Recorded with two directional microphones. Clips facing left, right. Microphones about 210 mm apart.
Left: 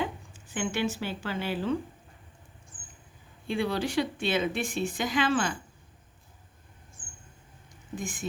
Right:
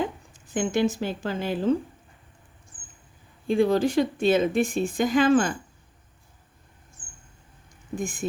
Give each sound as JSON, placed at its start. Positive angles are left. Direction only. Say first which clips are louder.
{"t": 0.5, "sound": "speech", "louder": "right 6 dB", "side_deg": -40}
{"t": 3.4, "sound": "speech", "louder": "right 8 dB", "side_deg": -45}
{"t": 7.9, "sound": "speech", "louder": "right 6 dB", "side_deg": -50}